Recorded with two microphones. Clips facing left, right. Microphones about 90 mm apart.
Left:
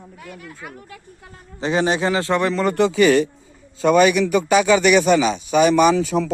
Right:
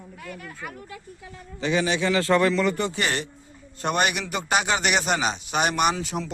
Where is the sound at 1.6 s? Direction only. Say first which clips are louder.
Left 4 dB; 35° left (ahead or behind).